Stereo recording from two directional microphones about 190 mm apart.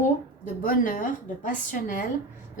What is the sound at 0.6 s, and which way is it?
A woman's voice, 45° left (ahead or behind).